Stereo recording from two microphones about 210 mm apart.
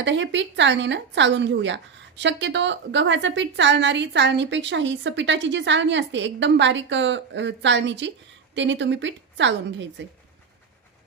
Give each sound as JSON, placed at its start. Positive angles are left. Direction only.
{"t": 0.0, "sound": "speech", "side_deg": -60}